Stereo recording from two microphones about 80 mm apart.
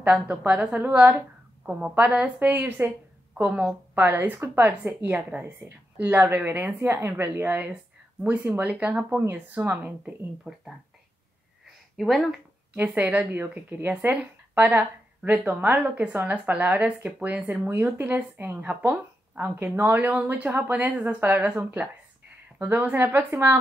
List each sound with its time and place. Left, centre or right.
0.0 s a woman's voice: centre
10.5 s a woman's voice: centre
12.0 s speech: centre
12.7 s a woman's voice: centre